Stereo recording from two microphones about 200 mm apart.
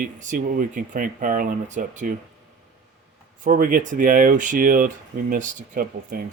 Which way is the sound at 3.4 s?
45° right (ahead or behind).